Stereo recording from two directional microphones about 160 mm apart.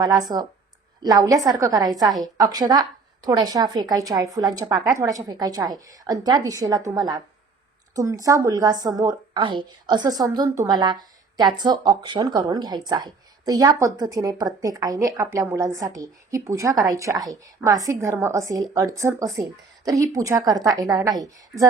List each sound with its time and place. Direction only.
0.0 s a woman's voice: 25° right (ahead or behind)